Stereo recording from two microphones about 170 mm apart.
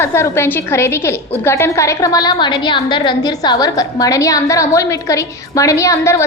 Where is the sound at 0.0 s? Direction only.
15° left (ahead or behind).